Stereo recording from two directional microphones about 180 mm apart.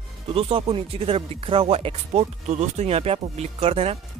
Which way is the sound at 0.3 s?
30° right (ahead or behind).